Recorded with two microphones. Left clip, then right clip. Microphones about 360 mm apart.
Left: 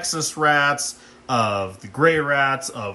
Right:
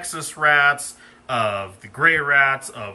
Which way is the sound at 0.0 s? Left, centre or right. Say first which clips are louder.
Even; centre.